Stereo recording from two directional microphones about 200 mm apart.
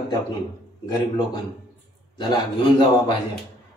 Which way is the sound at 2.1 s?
20° left (ahead or behind).